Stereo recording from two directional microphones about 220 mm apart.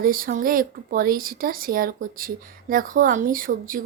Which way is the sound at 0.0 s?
40° right (ahead or behind).